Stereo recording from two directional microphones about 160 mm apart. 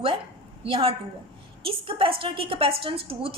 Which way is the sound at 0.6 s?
35° right (ahead or behind).